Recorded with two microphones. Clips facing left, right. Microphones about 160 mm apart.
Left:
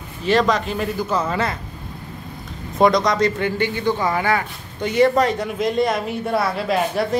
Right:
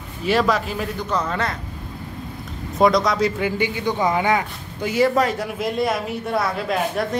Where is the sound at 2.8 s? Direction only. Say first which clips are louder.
Left 1 dB; centre (ahead or behind); by 4.5 s 20° right (ahead or behind).